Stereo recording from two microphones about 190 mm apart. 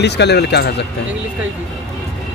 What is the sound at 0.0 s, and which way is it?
Speech, 65° left (ahead or behind).